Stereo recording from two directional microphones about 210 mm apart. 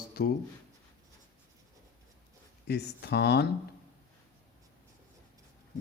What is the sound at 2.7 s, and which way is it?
Speech, 50° left (ahead or behind).